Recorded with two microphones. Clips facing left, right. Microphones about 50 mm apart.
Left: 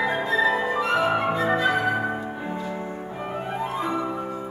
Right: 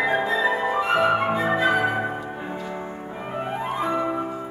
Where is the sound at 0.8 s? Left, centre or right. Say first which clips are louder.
Right 3 dB; right.